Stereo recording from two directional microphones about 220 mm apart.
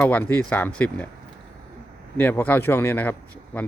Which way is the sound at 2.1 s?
5° left (ahead or behind).